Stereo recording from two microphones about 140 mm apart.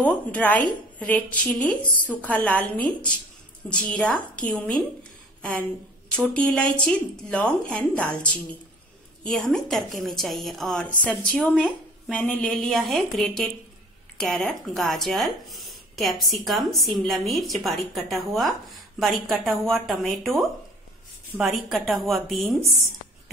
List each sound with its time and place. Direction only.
0.0 s a woman's voice: 10° left (ahead or behind)